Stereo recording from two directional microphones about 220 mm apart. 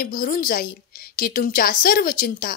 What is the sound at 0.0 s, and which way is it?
A woman's voice, 40° left (ahead or behind).